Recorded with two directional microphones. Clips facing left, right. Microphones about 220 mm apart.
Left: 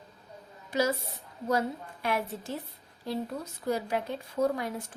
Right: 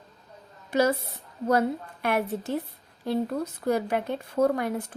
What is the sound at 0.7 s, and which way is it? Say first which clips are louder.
A woman's voice: right 5 dB; 55° right (ahead or behind).